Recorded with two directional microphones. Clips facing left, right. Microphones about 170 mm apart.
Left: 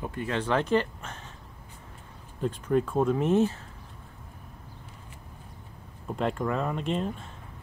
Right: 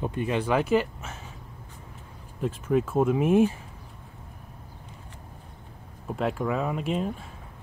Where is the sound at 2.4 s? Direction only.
5° right (ahead or behind).